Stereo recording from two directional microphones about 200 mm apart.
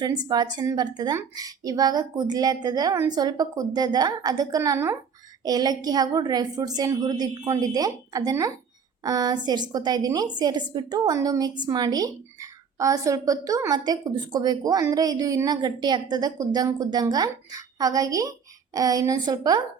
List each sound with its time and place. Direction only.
0.0 s a woman's voice: 20° right (ahead or behind)